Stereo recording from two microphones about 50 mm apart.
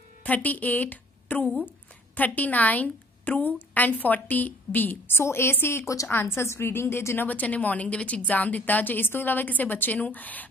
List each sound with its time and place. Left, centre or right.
0.2 s a woman's voice: left
5.1 s a woman's voice: left
7.2 s a woman's voice: left